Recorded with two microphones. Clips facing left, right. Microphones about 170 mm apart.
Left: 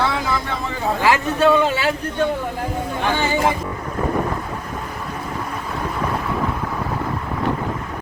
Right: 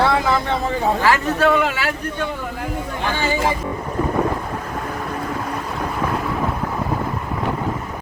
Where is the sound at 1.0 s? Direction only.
25° left (ahead or behind).